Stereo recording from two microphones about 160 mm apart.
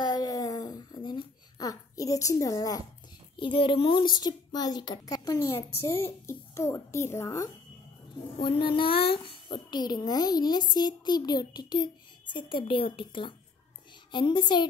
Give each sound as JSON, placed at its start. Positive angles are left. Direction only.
{"t": 0.0, "sound": "a sound", "side_deg": 25}
{"t": 3.3, "sound": "a child's voice", "side_deg": 30}
{"t": 8.4, "sound": "a child's voice", "side_deg": 30}